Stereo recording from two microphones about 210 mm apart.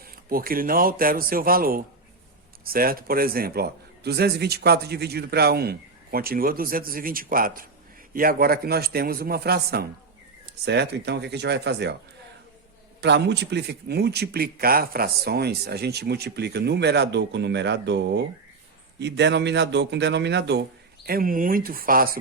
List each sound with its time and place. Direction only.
0.0 s a man's voice: 45° right (ahead or behind)
13.0 s a man's voice: 55° right (ahead or behind)
21.1 s a man's voice: 40° right (ahead or behind)